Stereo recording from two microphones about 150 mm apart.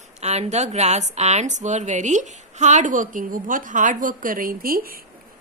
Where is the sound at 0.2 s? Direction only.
45° right (ahead or behind).